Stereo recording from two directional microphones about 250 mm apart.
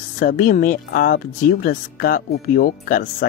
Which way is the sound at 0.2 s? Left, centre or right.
Left.